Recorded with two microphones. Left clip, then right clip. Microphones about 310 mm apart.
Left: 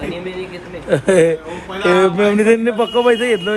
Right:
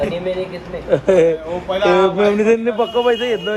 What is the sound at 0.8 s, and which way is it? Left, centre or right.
A man's voice, left.